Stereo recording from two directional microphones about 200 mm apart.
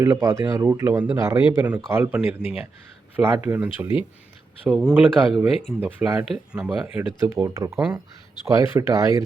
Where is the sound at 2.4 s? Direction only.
30° left (ahead or behind).